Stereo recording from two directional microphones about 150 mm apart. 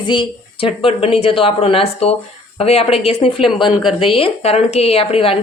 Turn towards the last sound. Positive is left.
turn(degrees=40)  # may be behind; listen again after turning